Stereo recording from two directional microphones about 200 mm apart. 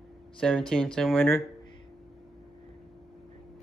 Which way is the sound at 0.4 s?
5° left (ahead or behind).